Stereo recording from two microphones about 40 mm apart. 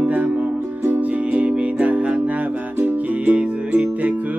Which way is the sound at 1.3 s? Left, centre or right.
Right.